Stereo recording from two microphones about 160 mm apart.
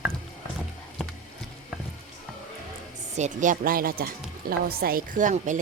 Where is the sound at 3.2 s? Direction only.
50° right (ahead or behind).